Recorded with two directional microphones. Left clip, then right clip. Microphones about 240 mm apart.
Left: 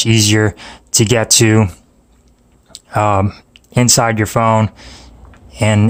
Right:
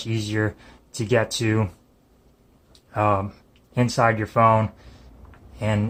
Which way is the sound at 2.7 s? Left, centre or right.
Left.